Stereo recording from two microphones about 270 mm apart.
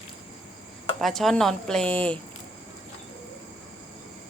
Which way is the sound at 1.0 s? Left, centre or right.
Centre.